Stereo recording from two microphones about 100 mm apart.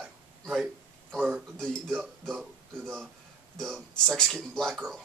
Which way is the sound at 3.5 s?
5° left (ahead or behind).